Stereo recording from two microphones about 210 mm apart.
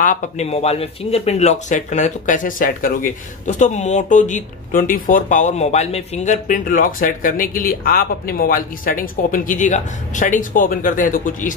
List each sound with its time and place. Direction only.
0.0 s speech: 35° left (ahead or behind)